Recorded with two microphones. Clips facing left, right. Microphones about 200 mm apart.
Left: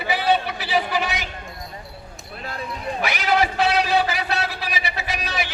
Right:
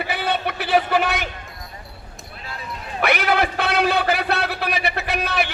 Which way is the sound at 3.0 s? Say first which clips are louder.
Right 2 dB; 60° right (ahead or behind).